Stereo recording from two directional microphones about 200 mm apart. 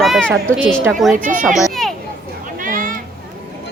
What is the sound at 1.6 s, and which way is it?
Children playing, centre (ahead or behind).